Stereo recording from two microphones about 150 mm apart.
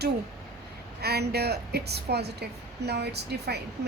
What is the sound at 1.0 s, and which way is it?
A woman's voice, 90° right.